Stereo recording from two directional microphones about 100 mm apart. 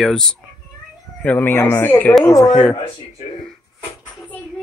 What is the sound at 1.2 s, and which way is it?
Speech, 20° left (ahead or behind).